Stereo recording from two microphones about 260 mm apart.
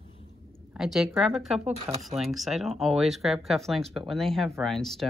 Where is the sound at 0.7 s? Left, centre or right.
Centre.